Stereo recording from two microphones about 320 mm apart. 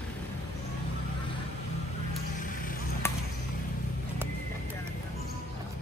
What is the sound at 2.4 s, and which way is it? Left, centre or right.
Vehicle, left.